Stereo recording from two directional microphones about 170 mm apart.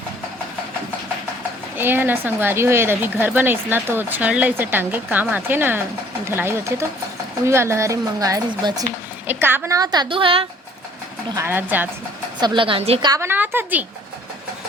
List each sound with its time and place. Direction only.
1.8 s a woman's voice: 10° right (ahead or behind); by 10.4 s 30° right (ahead or behind)
11.3 s speech: 10° right (ahead or behind)
12.4 s a woman's voice: 30° right (ahead or behind)
13.1 s speech: 15° right (ahead or behind)